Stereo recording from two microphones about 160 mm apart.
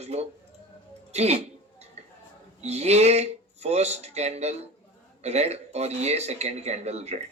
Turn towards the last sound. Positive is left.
turn(degrees=-40)  # may be behind; listen again after turning